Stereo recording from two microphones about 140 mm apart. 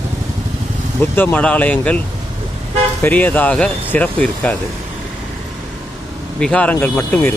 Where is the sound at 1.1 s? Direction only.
10° left (ahead or behind).